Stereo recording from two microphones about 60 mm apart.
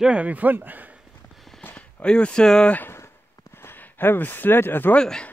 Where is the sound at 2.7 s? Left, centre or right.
Left.